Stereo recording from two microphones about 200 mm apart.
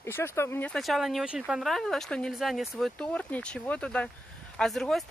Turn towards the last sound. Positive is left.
turn(degrees=0)  # may be behind; listen again after turning